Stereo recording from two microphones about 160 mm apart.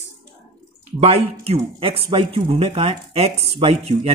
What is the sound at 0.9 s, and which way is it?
Speech, 40° right (ahead or behind).